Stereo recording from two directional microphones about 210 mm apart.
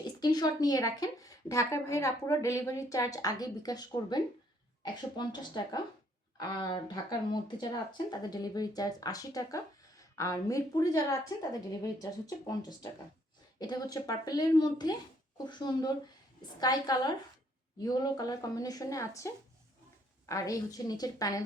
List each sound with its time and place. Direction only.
0.2 s a woman's voice: 20° left (ahead or behind)